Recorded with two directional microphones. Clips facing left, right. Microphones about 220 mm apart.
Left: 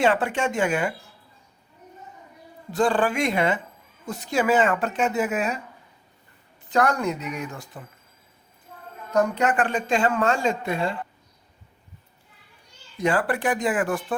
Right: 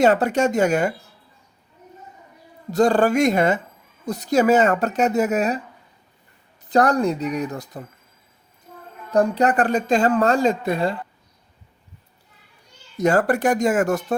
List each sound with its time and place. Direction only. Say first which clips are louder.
0.0 s speech: right 5 dB; 40° right (ahead or behind)
2.6 s speech: right 5 dB; 40° right (ahead or behind)
6.7 s speech: right 5 dB; 35° right (ahead or behind)
9.0 s speech: right 4 dB; 35° right (ahead or behind)
13.0 s speech: right 5 dB; 45° right (ahead or behind)